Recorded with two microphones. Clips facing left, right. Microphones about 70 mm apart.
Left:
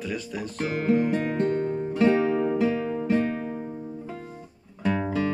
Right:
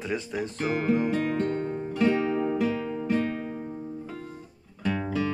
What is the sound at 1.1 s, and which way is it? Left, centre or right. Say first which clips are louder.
Music: left 2 dB; centre.